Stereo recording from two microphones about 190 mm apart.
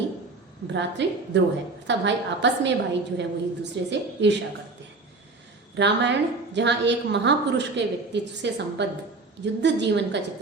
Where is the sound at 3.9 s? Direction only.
65° right (ahead or behind).